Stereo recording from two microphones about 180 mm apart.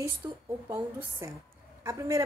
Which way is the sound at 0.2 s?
15° right (ahead or behind).